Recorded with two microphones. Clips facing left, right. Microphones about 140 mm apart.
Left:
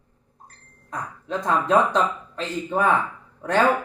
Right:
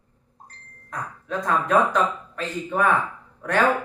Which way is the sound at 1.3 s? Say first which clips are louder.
Left 1 dB; 25° left (ahead or behind).